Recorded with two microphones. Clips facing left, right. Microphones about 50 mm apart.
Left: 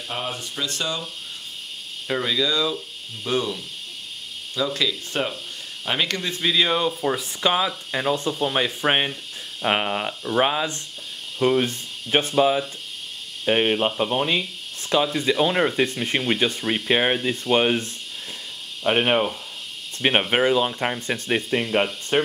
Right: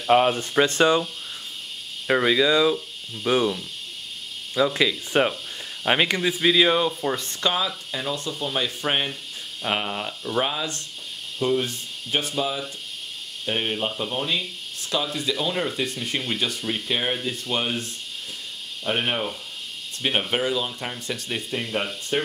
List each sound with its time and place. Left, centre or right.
0.3 s speech: right
2.0 s speech: right
4.6 s speech: right; by 7.5 s centre
7.5 s speech: left
11.3 s speech: left
18.9 s speech: left